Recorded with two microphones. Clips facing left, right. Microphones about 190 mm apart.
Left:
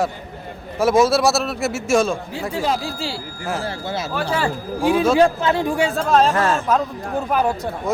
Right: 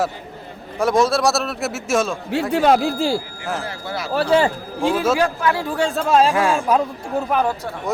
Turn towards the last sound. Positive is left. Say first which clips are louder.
# left 1 dB
turn(degrees=0)  # may be behind; listen again after turning